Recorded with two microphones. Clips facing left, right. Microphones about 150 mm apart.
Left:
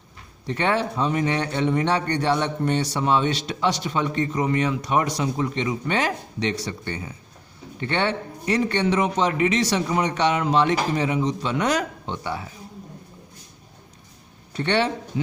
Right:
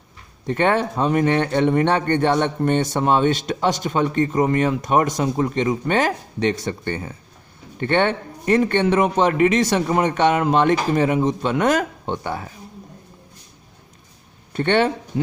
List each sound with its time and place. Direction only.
0.4 s speech: 50° right (ahead or behind)
14.5 s speech: 50° right (ahead or behind)